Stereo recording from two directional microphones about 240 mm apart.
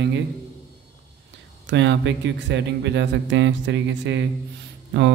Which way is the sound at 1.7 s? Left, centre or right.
Right.